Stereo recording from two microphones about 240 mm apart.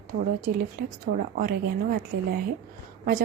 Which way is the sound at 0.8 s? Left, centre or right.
Right.